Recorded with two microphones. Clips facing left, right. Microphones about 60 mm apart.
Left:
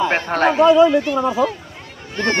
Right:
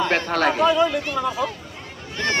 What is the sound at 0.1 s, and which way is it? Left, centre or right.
Speech, left.